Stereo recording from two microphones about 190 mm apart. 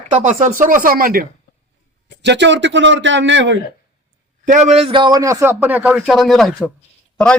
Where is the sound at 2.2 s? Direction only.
65° right (ahead or behind).